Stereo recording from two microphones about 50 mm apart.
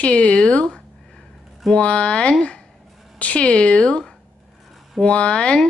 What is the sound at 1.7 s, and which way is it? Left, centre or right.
Speech, left.